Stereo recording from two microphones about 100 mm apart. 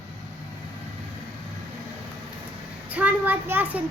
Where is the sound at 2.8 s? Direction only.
15° right (ahead or behind).